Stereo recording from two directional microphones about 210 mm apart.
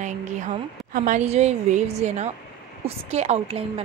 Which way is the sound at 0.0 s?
35° right (ahead or behind).